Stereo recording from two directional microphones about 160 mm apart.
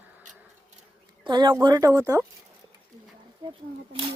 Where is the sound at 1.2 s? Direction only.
25° right (ahead or behind).